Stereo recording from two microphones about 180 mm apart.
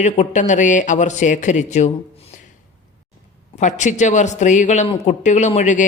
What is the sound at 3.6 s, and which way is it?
Speech, 40° left (ahead or behind).